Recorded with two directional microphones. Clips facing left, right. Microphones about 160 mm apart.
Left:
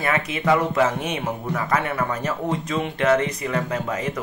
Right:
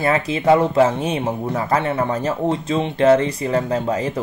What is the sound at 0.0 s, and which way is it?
Speech, 30° right (ahead or behind).